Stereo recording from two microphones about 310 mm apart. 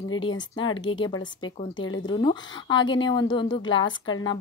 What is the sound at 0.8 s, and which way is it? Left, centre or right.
A woman's voice, centre.